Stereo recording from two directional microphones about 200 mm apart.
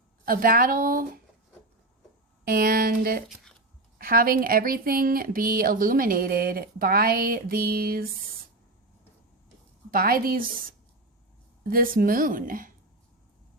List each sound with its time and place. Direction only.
0.3 s a woman's voice: 45° right (ahead or behind)
2.4 s a woman's voice: 45° right (ahead or behind)
9.9 s a woman's voice: 45° right (ahead or behind)